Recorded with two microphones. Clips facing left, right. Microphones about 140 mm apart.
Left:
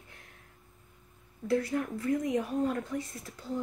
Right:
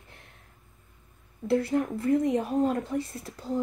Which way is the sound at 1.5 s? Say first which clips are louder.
Right 4 dB; 30° right (ahead or behind).